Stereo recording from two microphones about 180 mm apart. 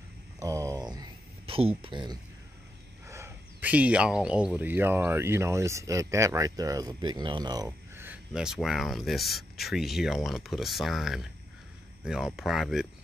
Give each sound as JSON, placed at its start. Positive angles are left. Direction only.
{"t": 0.4, "sound": "a sound", "side_deg": -15}
{"t": 1.4, "sound": "speech", "side_deg": -30}
{"t": 3.1, "sound": "speech", "side_deg": -15}